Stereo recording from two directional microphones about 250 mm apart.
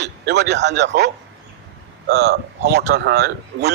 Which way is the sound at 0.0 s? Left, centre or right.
Right.